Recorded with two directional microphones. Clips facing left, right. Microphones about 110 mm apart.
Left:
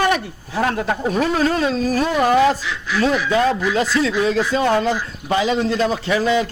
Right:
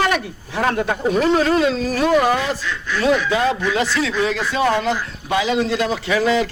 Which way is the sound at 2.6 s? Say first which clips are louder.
Right 1 dB; 5° left (ahead or behind).